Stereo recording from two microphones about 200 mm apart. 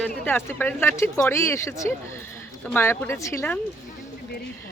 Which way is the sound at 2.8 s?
10° left (ahead or behind).